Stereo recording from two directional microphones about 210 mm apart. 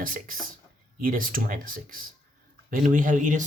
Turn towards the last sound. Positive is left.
turn(degrees=-35)  # may be behind; listen again after turning